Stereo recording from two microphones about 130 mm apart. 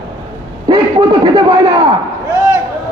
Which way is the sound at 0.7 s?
35° right (ahead or behind).